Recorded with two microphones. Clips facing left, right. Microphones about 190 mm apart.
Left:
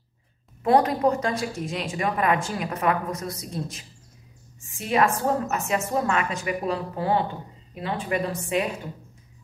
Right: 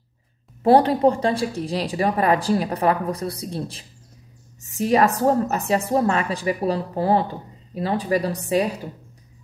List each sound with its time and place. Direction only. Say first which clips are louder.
0.7 s speech: right 4 dB; 30° right (ahead or behind)